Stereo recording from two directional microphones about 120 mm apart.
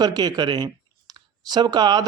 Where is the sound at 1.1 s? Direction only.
35° right (ahead or behind).